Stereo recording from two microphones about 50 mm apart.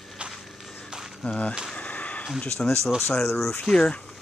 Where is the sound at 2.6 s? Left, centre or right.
Centre.